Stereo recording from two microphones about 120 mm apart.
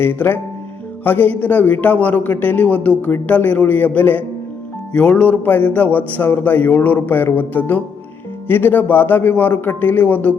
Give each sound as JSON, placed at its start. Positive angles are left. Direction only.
{"t": 0.0, "sound": "a man's voice", "side_deg": 15}